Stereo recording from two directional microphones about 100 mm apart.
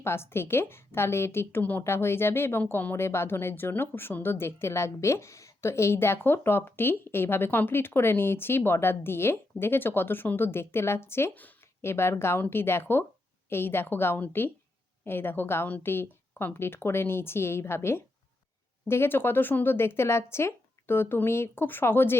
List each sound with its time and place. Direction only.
0.0 s speech: 25° left (ahead or behind)